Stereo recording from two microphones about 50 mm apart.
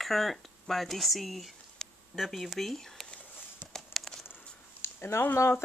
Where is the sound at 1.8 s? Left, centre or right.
Centre.